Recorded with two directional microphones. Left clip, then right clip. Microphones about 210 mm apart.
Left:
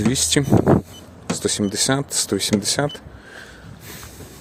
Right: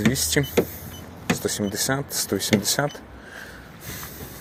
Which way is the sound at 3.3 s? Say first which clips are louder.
Even; 20° left (ahead or behind).